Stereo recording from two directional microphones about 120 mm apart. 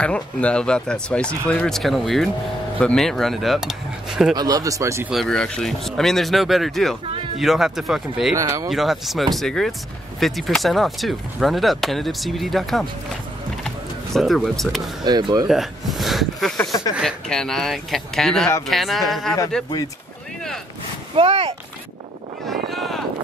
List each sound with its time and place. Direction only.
0.0 s speech: 10° left (ahead or behind)
4.4 s speech: 30° right (ahead or behind)
5.1 s speech: 5° left (ahead or behind)
8.4 s speech: 30° right (ahead or behind)
8.6 s speech: centre (ahead or behind)
13.7 s a sound: centre (ahead or behind)
15.0 s speech: 35° right (ahead or behind)
15.4 s speech: 5° right (ahead or behind)
21.2 s speech: 55° right (ahead or behind)
22.7 s a sound: centre (ahead or behind)